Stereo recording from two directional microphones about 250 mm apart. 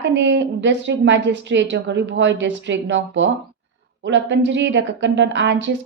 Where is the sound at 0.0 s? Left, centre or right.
Right.